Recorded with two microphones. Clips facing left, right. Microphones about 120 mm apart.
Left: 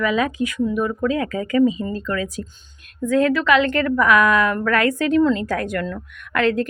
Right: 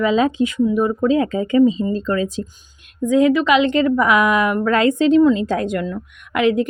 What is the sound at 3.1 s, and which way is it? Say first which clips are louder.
A woman's voice: right 3 dB; 15° right (ahead or behind).